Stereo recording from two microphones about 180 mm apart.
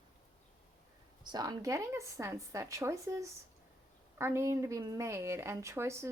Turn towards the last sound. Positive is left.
turn(degrees=-15)  # may be behind; listen again after turning